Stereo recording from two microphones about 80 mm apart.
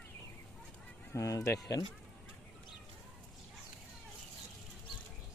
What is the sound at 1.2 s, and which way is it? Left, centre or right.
Speech, left.